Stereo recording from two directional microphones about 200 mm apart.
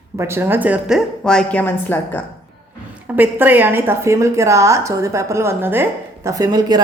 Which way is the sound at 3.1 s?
10° right (ahead or behind).